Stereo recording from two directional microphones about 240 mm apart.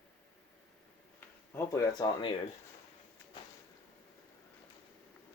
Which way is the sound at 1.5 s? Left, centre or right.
Centre.